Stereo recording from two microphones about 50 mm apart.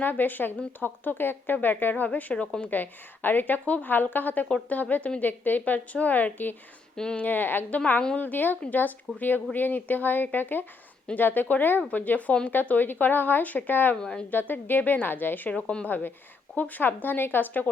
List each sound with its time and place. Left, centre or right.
0.0 s a woman's voice: left
2.3 s speech: left
2.6 s a woman's voice: left
6.9 s speech: centre
7.2 s a woman's voice: left
13.9 s a woman's voice: centre
14.3 s a woman's voice: left
15.4 s speech: left
16.6 s a woman's voice: left